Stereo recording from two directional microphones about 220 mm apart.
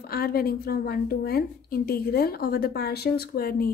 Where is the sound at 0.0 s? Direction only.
45° left (ahead or behind).